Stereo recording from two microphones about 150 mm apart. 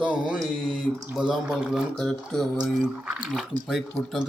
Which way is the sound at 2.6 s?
5° right (ahead or behind).